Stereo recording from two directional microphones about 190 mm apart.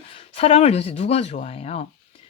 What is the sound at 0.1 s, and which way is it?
Speech, 30° left (ahead or behind).